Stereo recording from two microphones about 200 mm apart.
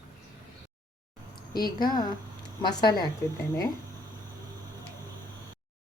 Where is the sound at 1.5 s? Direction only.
50° left (ahead or behind).